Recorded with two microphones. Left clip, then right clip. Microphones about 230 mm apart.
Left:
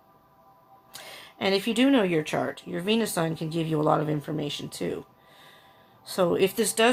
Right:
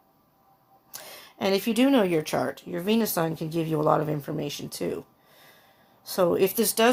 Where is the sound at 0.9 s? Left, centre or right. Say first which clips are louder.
Even; right.